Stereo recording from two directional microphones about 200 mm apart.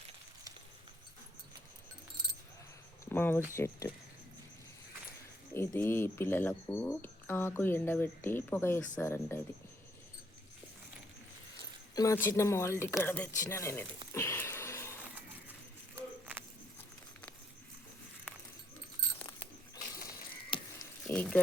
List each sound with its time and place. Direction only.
3.1 s speech: 10° left (ahead or behind)
5.5 s speech: 10° left (ahead or behind)
11.9 s speech: 15° left (ahead or behind)
14.1 s a sound: 10° left (ahead or behind)
16.0 s a sound: 10° right (ahead or behind)
19.7 s ratchet: 20° left (ahead or behind)
21.1 s speech: 5° left (ahead or behind)